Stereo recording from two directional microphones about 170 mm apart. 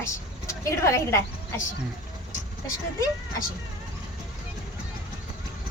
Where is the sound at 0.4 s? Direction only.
20° left (ahead or behind).